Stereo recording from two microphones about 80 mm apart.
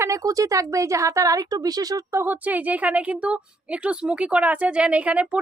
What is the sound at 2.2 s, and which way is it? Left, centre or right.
A woman's voice, centre.